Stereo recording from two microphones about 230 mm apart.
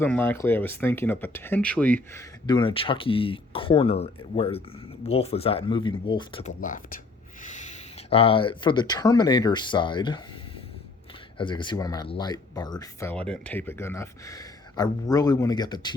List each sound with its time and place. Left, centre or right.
0.0 s speech: centre
2.1 s speech: centre
6.6 s speech: left; by 10.2 s centre
11.3 s speech: left